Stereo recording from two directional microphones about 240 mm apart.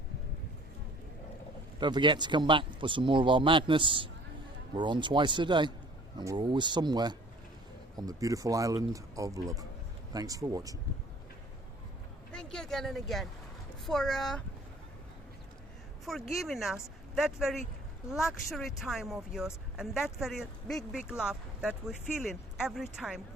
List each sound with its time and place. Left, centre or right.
1.8 s speech: centre
12.3 s speech: centre
16.0 s speech: centre